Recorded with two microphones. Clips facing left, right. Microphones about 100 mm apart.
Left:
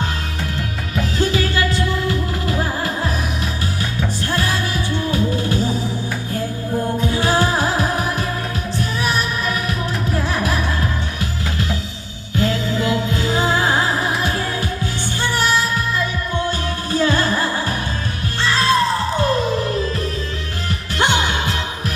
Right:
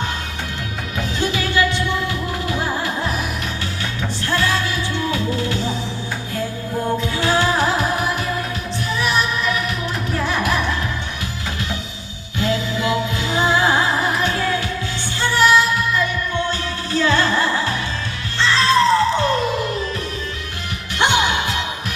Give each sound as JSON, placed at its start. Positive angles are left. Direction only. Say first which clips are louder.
{"t": 0.9, "sound": "music", "louder": "left 3 dB", "side_deg": 40}
{"t": 4.3, "sound": "music", "louder": "right 4 dB", "side_deg": 40}
{"t": 7.0, "sound": "music", "louder": "left 2 dB", "side_deg": 40}
{"t": 9.0, "sound": "music", "louder": "right 3 dB", "side_deg": 40}
{"t": 12.4, "sound": "music", "louder": "left 1 dB", "side_deg": 40}
{"t": 21.0, "sound": "music", "louder": "right 1 dB", "side_deg": 35}